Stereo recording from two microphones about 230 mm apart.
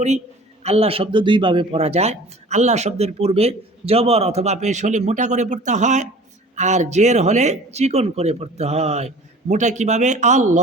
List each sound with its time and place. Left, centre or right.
0.6 s speech: right